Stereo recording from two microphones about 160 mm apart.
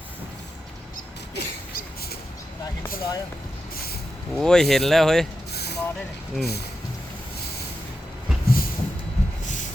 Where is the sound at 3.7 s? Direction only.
70° left (ahead or behind).